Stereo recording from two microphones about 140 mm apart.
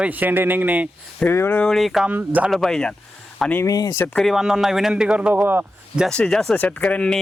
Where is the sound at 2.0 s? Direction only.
10° right (ahead or behind).